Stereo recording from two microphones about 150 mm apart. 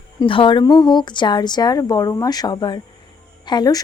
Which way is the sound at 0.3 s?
35° left (ahead or behind).